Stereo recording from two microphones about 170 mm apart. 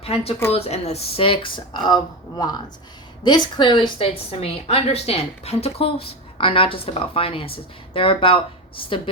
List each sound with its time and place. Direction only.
0.0 s a woman's voice: 35° left (ahead or behind)
3.2 s a woman's voice: 25° left (ahead or behind)